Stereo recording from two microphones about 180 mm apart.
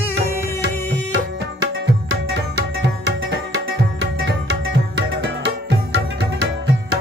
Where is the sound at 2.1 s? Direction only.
65° right (ahead or behind).